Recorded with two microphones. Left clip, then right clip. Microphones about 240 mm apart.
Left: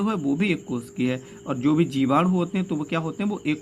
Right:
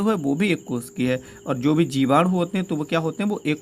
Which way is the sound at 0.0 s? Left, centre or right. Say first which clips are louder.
Right 3 dB; right.